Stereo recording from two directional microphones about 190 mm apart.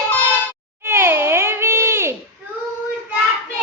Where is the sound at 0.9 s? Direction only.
15° right (ahead or behind).